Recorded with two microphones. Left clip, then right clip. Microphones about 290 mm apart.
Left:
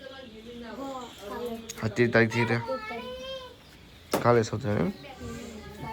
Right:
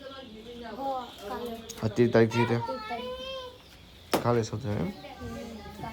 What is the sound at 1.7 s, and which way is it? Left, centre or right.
Speech, centre.